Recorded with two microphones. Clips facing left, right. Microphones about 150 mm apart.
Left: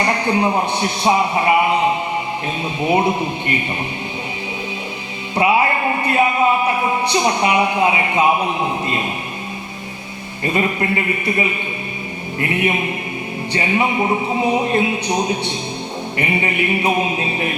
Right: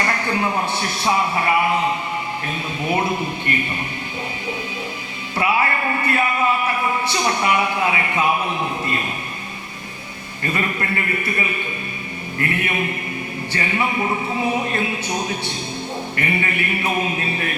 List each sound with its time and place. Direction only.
0.0 s a man's voice: 20° left (ahead or behind)
5.3 s music: 20° left (ahead or behind)
6.7 s speech: 20° left (ahead or behind)
10.4 s a man's voice: 20° left (ahead or behind)